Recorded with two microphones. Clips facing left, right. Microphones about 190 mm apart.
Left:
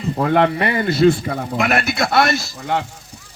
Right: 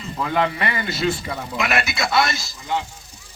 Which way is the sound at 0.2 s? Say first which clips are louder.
Left 5 dB; 55° left (ahead or behind).